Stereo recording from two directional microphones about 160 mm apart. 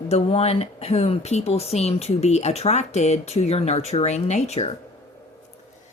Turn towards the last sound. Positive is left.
turn(degrees=45)  # may be behind; listen again after turning